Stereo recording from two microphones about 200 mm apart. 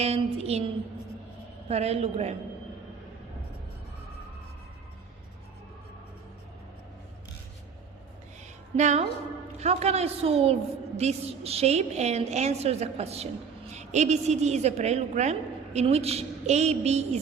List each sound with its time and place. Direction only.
0.0 s a woman's voice: 30° right (ahead or behind)
1.6 s a woman's voice: 30° right (ahead or behind)
8.7 s a woman's voice: 35° right (ahead or behind)